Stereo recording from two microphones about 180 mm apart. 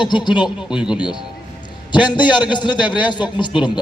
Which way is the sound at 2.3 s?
25° left (ahead or behind).